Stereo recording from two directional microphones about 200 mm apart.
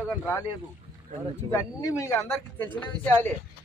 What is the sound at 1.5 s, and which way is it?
Speech, 15° left (ahead or behind).